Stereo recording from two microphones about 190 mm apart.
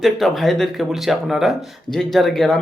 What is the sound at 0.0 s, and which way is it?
Speech, centre (ahead or behind).